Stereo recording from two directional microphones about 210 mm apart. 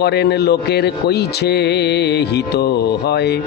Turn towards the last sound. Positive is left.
turn(degrees=50)  # may be behind; listen again after turning